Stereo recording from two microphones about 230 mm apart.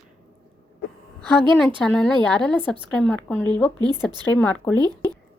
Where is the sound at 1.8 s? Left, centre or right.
Centre.